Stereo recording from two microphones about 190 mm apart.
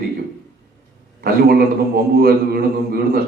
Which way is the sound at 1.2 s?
55° right (ahead or behind).